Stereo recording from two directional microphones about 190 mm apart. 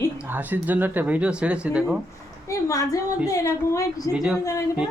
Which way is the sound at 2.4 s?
15° left (ahead or behind).